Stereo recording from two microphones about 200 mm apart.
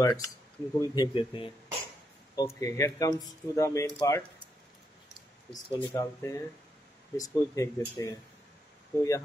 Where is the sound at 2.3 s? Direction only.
15° left (ahead or behind).